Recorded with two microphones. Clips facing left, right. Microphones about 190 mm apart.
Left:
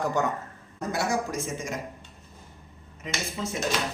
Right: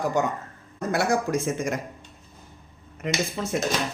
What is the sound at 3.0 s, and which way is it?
Speech, 65° right (ahead or behind).